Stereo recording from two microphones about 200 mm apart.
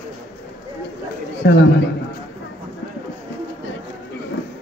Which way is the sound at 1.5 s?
60° left (ahead or behind).